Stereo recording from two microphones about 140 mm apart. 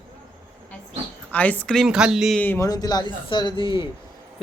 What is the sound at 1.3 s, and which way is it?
Speech, 10° left (ahead or behind).